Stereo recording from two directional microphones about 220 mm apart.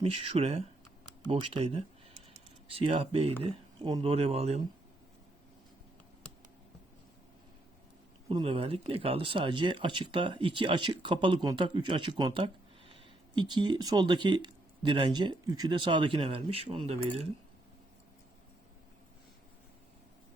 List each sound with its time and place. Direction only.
0.0 s speech: 25° right (ahead or behind)
8.3 s speech: 25° right (ahead or behind)